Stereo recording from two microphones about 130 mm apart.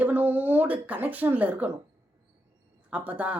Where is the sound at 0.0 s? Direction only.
15° right (ahead or behind).